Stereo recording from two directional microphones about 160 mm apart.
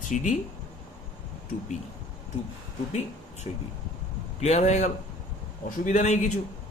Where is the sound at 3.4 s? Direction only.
45° left (ahead or behind).